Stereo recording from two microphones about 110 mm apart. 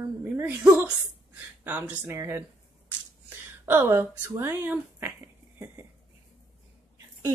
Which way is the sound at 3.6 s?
20° right (ahead or behind).